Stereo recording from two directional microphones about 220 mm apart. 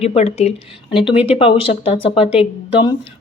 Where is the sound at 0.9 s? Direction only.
5° right (ahead or behind).